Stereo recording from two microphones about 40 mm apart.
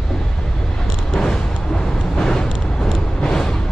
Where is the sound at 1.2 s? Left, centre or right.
Centre.